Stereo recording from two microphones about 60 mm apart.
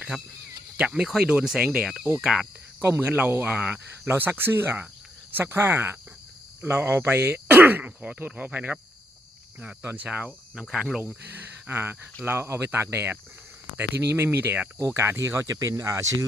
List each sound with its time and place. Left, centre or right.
0.1 s speech: centre
1.0 s speech: centre
3.0 s speech: right
4.0 s speech: right
9.8 s speech: right; by 10.8 s centre
11.7 s speech: right
14.9 s speech: right
15.4 s speech: right